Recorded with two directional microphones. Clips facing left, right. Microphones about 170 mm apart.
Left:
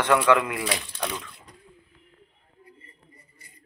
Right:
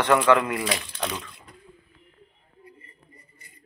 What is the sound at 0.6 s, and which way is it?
Speech, 20° right (ahead or behind).